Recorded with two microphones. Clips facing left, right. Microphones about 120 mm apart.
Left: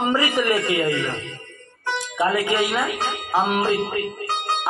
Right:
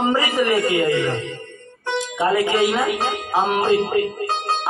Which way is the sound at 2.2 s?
30° right (ahead or behind).